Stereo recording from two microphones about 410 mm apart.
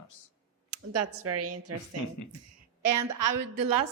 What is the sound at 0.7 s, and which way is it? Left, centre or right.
A woman's voice, right.